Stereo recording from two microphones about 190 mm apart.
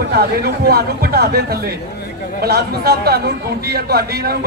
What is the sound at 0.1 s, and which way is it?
A man's voice, 55° right (ahead or behind).